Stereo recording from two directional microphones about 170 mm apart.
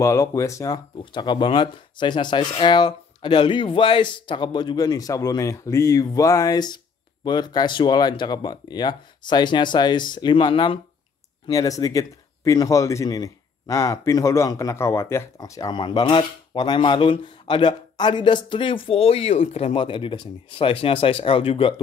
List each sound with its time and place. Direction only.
0.0 s speech: 20° left (ahead or behind)